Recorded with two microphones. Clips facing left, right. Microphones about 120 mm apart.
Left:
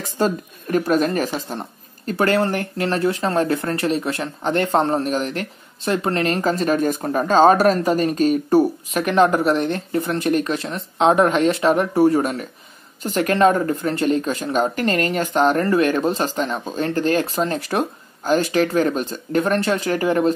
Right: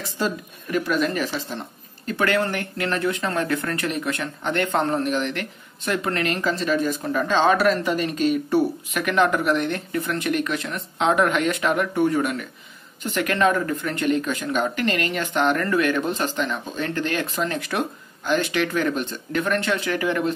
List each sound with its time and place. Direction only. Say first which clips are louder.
0.0 s speech: left 5 dB; 45° left (ahead or behind)